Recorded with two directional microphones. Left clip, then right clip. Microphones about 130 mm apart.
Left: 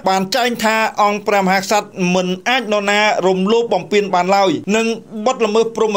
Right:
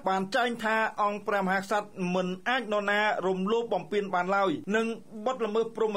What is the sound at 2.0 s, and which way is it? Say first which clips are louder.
Speech: left 13 dB; 10° left (ahead or behind).